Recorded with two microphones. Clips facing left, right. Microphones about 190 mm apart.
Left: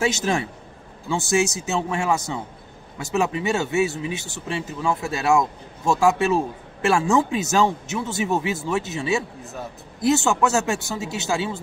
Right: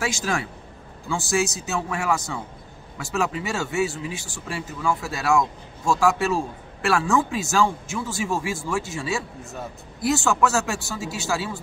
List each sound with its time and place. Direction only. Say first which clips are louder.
0.0 s speech: left 4 dB; 20° left (ahead or behind)